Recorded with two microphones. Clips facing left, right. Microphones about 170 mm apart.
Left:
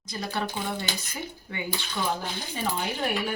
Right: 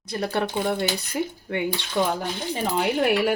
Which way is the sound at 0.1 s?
60° right (ahead or behind).